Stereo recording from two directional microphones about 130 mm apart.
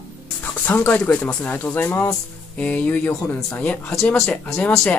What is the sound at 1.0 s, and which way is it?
Speech, 10° left (ahead or behind).